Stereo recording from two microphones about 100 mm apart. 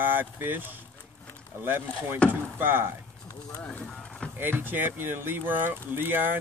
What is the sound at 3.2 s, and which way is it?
Speech, 35° left (ahead or behind).